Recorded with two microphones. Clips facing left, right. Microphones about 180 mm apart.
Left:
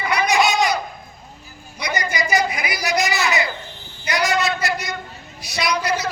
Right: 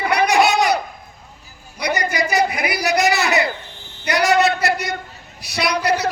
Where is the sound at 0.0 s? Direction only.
60° right (ahead or behind).